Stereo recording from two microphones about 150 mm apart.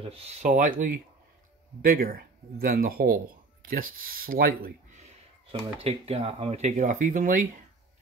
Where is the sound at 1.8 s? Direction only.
75° right (ahead or behind).